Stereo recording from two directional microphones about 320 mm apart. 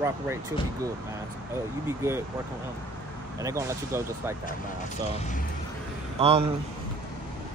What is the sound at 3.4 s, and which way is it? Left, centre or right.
Speech, centre.